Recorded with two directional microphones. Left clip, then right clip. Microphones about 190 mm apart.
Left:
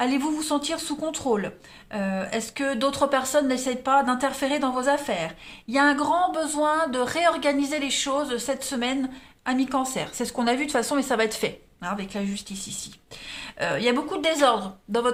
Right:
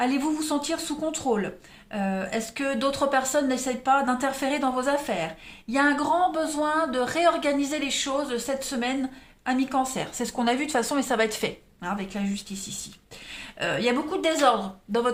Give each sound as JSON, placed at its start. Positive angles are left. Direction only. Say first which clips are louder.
{"t": 0.0, "sound": "a woman's voice", "louder": "left 1 dB", "side_deg": 25}